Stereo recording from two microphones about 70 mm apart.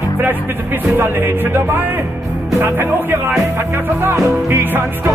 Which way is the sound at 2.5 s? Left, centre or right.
Right.